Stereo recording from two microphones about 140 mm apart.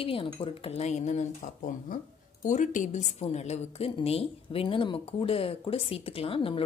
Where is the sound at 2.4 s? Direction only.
60° left (ahead or behind); by 6.6 s 40° left (ahead or behind).